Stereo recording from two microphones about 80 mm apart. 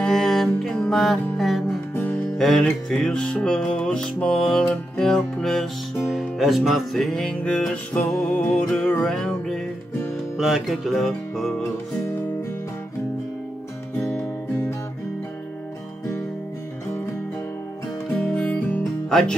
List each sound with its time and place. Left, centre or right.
0.0 s music: centre
2.0 s music: centre
2.2 s music: centre
10.3 s music: centre
18.2 s music: centre
19.0 s speech: centre